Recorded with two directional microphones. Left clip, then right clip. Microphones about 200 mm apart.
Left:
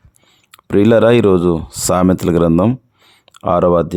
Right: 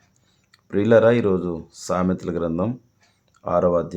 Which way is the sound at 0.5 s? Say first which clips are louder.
Left 5 dB; 50° left (ahead or behind).